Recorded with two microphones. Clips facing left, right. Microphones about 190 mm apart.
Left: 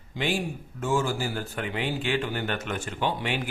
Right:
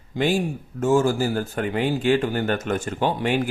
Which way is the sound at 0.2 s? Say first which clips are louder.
Right 7 dB; 45° right (ahead or behind).